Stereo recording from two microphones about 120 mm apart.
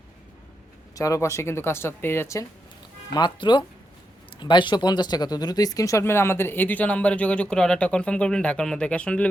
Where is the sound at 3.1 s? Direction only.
40° left (ahead or behind).